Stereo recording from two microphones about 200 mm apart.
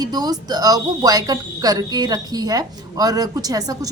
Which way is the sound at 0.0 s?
20° right (ahead or behind).